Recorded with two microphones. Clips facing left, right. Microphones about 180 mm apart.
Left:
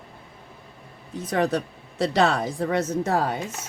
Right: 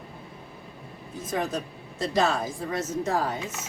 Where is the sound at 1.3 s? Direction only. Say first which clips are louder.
Left 6 dB; 70° left (ahead or behind).